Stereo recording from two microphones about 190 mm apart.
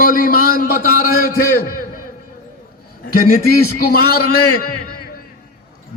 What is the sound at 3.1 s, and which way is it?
A man's voice, 50° left (ahead or behind).